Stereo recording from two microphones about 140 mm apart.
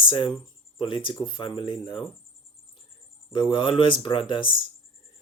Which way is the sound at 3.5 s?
35° left (ahead or behind).